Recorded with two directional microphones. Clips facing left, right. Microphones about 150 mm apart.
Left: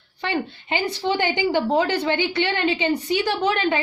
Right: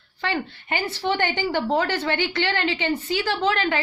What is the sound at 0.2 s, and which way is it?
A woman's voice, 20° left (ahead or behind).